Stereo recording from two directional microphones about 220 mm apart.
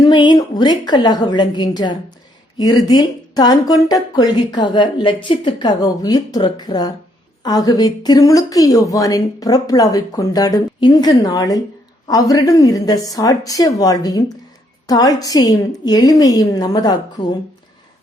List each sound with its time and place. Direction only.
0.0 s a woman's voice: 20° left (ahead or behind)